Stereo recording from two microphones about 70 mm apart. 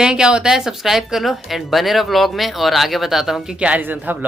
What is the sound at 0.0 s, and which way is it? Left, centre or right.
Speech, centre.